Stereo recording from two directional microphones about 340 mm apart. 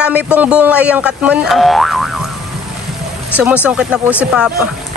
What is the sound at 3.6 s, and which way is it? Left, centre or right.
Speech, centre.